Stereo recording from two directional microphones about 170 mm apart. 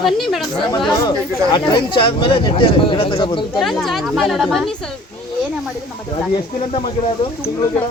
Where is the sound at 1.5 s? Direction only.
30° left (ahead or behind).